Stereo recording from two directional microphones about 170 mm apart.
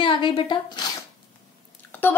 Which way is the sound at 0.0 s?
30° left (ahead or behind).